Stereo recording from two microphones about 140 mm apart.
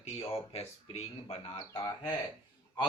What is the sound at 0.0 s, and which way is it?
Speech, 45° left (ahead or behind).